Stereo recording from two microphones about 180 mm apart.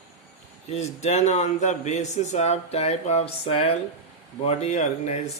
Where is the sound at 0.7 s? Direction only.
35° left (ahead or behind).